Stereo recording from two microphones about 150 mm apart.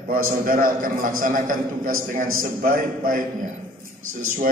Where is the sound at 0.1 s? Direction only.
70° right (ahead or behind).